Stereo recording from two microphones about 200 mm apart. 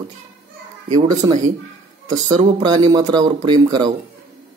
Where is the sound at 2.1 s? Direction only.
35° right (ahead or behind).